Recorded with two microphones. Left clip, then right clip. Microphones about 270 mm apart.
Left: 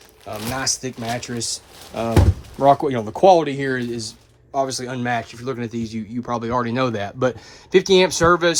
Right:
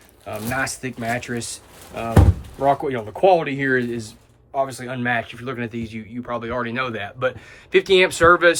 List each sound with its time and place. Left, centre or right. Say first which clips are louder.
0.5 s speech: even; centre
2.6 s speech: left 4 dB; centre
4.5 s speech: left 1 dB; centre